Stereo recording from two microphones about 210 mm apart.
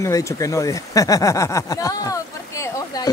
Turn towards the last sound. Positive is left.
turn(degrees=15)  # may be behind; listen again after turning